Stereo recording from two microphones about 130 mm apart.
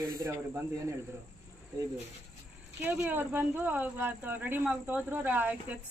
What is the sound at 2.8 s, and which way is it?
Speech, 15° right (ahead or behind).